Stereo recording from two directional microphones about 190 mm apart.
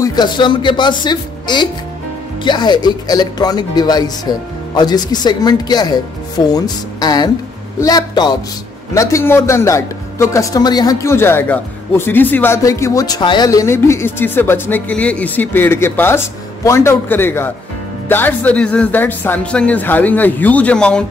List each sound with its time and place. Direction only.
0.0 s speech: 20° left (ahead or behind); by 21.0 s 5° left (ahead or behind)